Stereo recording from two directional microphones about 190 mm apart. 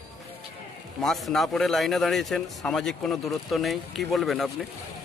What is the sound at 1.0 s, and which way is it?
A man's voice, centre (ahead or behind).